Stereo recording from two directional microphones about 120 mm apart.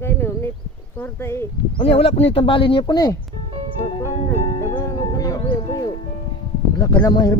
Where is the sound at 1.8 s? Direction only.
50° left (ahead or behind); by 3.2 s 35° left (ahead or behind).